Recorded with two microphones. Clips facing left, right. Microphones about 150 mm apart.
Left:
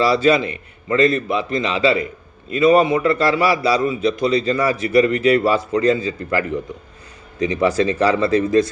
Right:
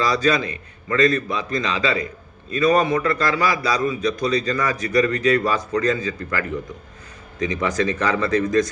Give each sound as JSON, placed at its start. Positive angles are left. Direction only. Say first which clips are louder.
{"t": 0.0, "sound": "a man's voice", "louder": "left 5 dB", "side_deg": 25}